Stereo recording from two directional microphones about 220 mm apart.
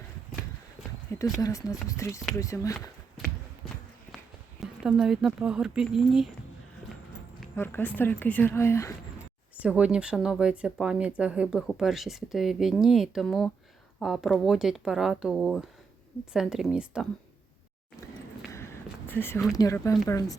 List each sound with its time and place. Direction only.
1.4 s speech: 15° left (ahead or behind)
4.6 s speech: 5° right (ahead or behind)
7.5 s speech: 10° left (ahead or behind)
9.6 s speech: 5° right (ahead or behind)
18.5 s a sound: 10° left (ahead or behind)
19.5 s speech: 15° left (ahead or behind)